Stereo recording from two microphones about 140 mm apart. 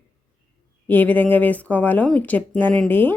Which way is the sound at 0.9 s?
10° left (ahead or behind).